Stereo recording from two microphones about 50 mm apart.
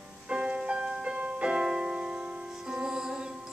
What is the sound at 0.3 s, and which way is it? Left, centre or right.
Music, right.